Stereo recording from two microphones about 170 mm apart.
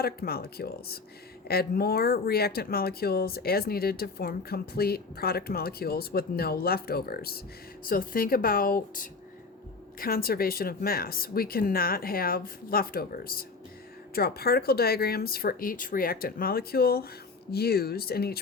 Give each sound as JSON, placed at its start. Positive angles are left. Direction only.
{"t": 0.0, "sound": "speech", "side_deg": 65}